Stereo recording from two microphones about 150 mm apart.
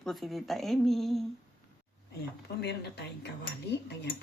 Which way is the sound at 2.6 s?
90° left.